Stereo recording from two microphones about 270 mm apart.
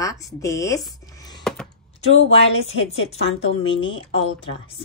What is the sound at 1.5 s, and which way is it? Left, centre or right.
Computer keyboard, centre.